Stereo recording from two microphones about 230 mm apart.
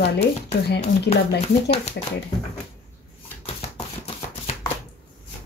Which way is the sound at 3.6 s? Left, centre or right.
Left.